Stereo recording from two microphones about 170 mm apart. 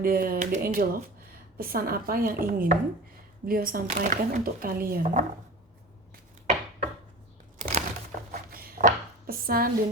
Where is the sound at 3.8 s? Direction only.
50° right (ahead or behind).